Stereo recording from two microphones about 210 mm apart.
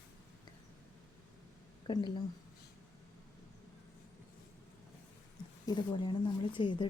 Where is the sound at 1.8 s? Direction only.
20° left (ahead or behind).